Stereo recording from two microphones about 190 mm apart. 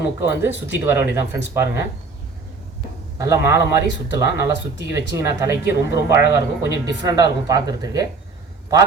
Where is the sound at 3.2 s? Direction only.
15° right (ahead or behind).